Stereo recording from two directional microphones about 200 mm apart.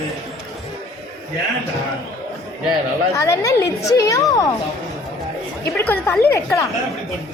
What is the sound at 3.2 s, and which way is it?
A woman's voice, 15° left (ahead or behind).